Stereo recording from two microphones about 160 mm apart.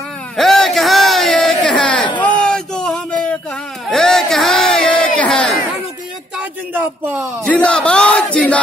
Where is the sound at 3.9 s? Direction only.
Centre (ahead or behind).